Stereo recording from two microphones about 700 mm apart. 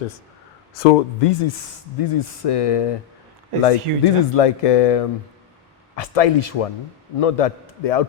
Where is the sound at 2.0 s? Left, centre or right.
Left.